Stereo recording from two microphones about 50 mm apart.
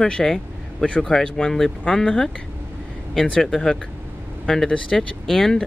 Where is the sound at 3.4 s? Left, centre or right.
Centre.